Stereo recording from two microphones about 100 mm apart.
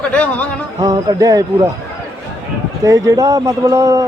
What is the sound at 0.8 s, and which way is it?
Speech, 40° right (ahead or behind).